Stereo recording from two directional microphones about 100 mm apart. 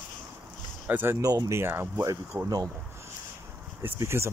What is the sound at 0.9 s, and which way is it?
Speech, 20° right (ahead or behind).